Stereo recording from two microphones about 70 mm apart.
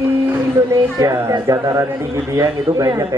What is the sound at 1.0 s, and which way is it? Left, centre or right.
A man's voice, right.